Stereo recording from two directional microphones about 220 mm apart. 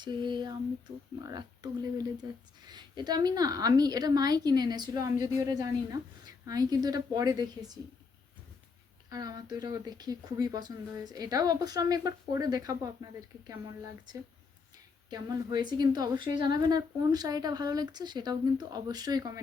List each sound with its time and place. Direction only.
0.0 s speech: 20° right (ahead or behind)
9.0 s speech: 15° right (ahead or behind)
15.1 s speech: 20° right (ahead or behind)